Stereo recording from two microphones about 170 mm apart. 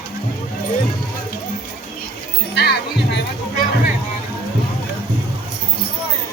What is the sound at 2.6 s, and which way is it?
Music, 90° left.